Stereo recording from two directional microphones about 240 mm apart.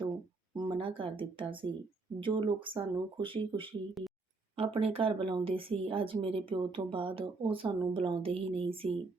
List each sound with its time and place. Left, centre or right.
0.5 s speech: centre